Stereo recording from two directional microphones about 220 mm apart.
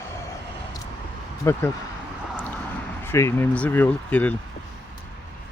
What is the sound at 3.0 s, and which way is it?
Speech, 10° left (ahead or behind).